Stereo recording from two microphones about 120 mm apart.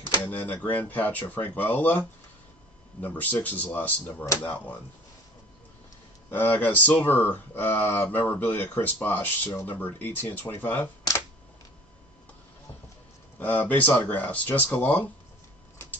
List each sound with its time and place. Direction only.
0.5 s speech: 15° left (ahead or behind)
6.3 s speech: 15° left (ahead or behind)
13.4 s speech: 15° left (ahead or behind)